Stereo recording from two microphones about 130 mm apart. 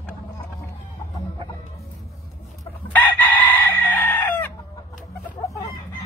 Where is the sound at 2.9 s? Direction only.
15° left (ahead or behind).